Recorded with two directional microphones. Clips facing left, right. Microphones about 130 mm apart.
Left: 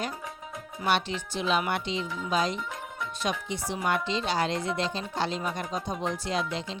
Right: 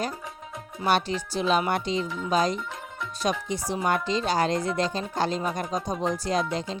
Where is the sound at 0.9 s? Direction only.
40° right (ahead or behind).